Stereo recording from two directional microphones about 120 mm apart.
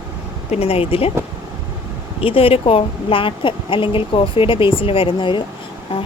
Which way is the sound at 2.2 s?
50° left (ahead or behind).